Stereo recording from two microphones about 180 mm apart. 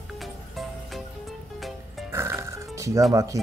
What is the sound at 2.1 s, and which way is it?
Music, 15° right (ahead or behind).